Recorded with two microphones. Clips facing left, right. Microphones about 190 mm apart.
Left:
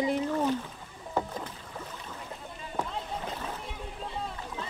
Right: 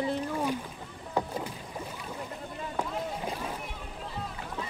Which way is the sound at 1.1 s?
10° right (ahead or behind).